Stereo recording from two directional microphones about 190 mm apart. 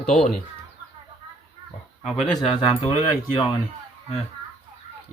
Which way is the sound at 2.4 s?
30° left (ahead or behind).